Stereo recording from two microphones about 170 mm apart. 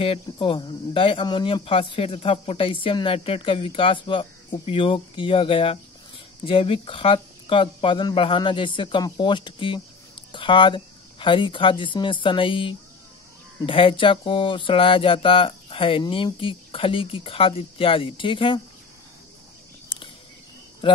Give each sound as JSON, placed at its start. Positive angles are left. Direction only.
{"t": 0.0, "sound": "speech", "side_deg": 30}
{"t": 20.8, "sound": "speech", "side_deg": 30}